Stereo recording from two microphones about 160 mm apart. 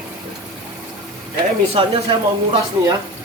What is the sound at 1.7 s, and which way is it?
Speech, 30° right (ahead or behind).